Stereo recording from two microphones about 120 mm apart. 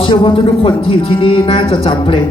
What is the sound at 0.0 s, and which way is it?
Speech, 40° left (ahead or behind).